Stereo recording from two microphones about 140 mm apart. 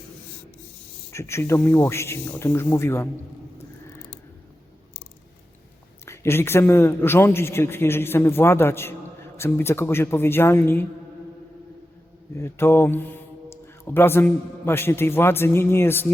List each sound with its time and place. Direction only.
1.1 s speech: 20° left (ahead or behind)
6.1 s a man's voice: 20° left (ahead or behind)
12.4 s speech: 15° left (ahead or behind)